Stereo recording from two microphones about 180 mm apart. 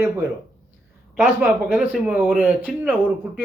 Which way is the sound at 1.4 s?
5° right (ahead or behind).